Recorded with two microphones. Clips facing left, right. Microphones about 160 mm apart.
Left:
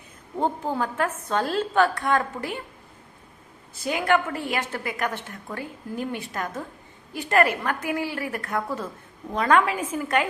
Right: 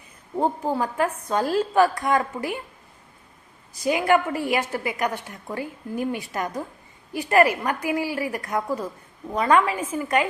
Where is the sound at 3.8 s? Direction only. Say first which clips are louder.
Right 3 dB; 5° right (ahead or behind).